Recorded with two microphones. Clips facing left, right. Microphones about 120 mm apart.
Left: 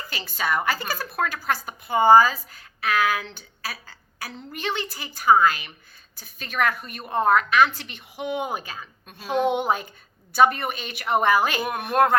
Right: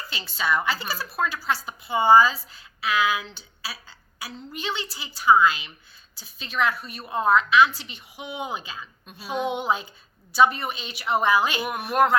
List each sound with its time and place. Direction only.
0.1 s a woman's voice: 45° left (ahead or behind)